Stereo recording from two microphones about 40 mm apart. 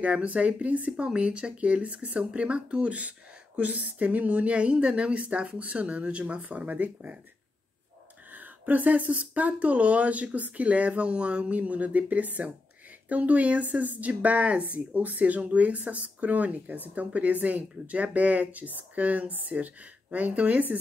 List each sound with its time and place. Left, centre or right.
0.0 s speech: right
1.0 s speech: right
8.3 s speech: right